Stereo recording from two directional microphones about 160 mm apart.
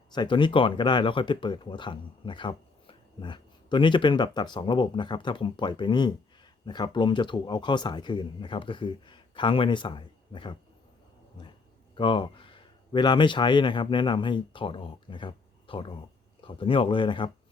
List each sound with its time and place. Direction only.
0.1 s speech: 30° left (ahead or behind)
11.9 s a man's voice: 30° left (ahead or behind)